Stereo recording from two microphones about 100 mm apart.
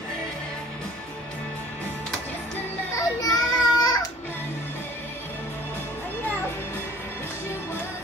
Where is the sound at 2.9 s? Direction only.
40° left (ahead or behind).